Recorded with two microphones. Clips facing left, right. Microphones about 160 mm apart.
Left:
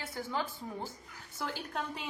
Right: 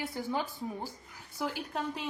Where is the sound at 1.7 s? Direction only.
Centre (ahead or behind).